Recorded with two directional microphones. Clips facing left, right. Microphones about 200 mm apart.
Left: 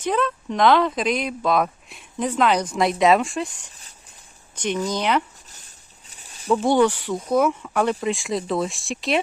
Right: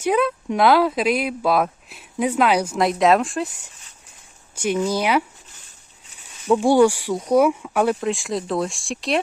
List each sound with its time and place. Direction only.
0.0 s speech: 10° right (ahead or behind)
6.1 s a sound: 35° left (ahead or behind)
6.5 s speech: 10° right (ahead or behind)